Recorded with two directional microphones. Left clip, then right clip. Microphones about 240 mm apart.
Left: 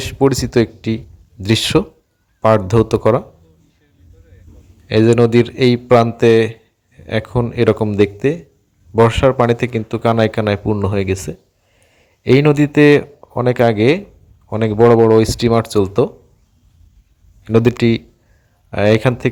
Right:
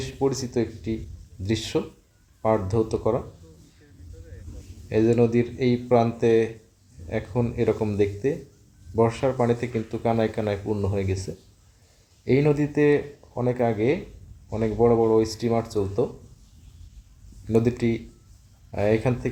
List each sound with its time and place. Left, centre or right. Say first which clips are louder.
0.1 s speech: left 11 dB; left
2.6 s speech: left 10 dB; left
4.9 s speech: left 9 dB; left
12.2 s speech: left 10 dB; left
17.5 s speech: left 9 dB; left